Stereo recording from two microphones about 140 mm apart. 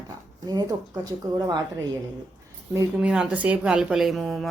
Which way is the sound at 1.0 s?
30° right (ahead or behind).